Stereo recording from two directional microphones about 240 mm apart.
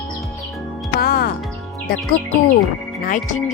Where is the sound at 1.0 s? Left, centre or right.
Left.